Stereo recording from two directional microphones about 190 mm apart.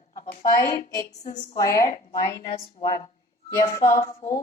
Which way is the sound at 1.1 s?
35° left (ahead or behind).